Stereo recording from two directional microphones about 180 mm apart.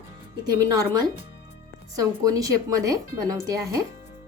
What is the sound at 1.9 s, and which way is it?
Speech, 20° right (ahead or behind).